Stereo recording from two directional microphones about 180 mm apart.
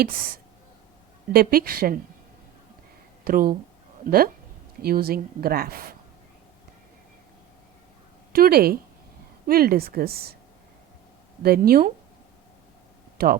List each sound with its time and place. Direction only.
1.3 s speech: 55° right (ahead or behind)
3.2 s speech: 55° right (ahead or behind)
8.3 s speech: 55° right (ahead or behind)
11.4 s speech: 55° right (ahead or behind)
13.2 s speech: 55° right (ahead or behind)